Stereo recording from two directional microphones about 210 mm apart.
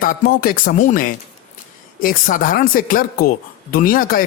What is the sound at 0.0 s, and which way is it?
Speech, 40° left (ahead or behind).